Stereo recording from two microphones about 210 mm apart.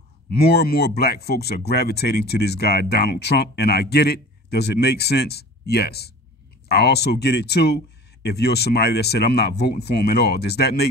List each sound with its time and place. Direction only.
0.3 s speech: 50° left (ahead or behind)